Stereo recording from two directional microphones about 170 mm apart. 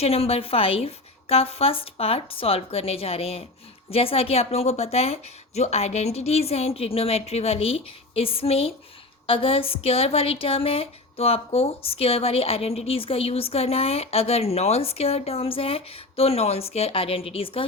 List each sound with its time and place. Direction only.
0.0 s a woman's voice: 35° left (ahead or behind)